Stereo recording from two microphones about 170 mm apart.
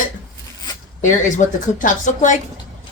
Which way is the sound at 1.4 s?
50° left (ahead or behind).